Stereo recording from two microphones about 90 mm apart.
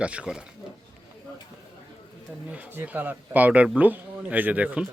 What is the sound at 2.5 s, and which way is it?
Speech, 15° right (ahead or behind).